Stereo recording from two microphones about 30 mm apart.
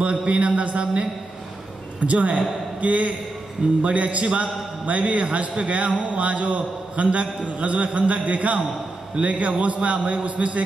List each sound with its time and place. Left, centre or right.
0.0 s a man's voice: right